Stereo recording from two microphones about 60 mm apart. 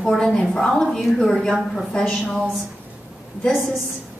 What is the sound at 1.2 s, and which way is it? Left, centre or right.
Speech, centre.